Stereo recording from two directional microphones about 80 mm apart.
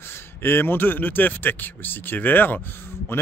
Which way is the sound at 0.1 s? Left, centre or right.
Left.